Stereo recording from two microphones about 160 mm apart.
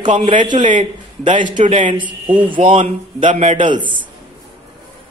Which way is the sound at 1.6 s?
50° right (ahead or behind).